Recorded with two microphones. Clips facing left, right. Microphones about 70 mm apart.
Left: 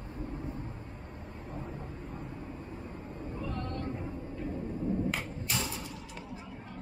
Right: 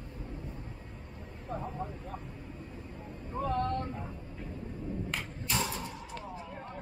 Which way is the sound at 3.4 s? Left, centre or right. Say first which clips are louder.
Right 8 dB; right.